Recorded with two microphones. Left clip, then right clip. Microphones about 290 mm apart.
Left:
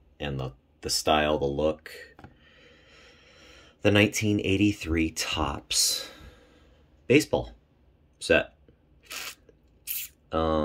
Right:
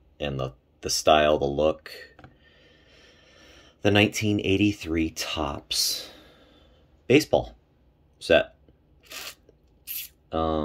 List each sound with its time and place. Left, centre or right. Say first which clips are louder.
0.2 s speech: right 4 dB; centre
2.4 s a sound: left 1 dB; centre
4.5 s speech: right 2 dB; left
4.7 s speech: even; centre
9.8 s spray: even; centre